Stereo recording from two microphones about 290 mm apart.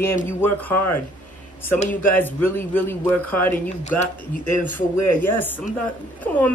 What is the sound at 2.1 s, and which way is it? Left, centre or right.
A man's voice, centre.